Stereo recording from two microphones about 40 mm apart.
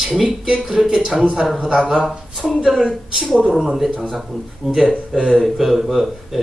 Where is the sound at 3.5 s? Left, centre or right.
Centre.